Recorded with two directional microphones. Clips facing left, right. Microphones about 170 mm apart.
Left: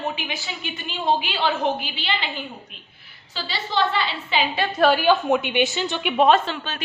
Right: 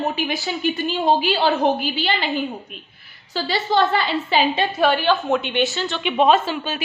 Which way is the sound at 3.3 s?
45° right (ahead or behind).